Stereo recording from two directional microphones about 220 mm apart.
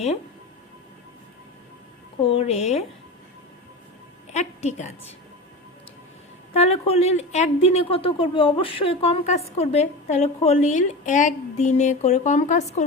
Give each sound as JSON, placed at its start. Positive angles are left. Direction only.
{"t": 2.2, "sound": "a woman's voice", "side_deg": 25}
{"t": 4.3, "sound": "a woman's voice", "side_deg": 30}
{"t": 6.5, "sound": "a woman's voice", "side_deg": 30}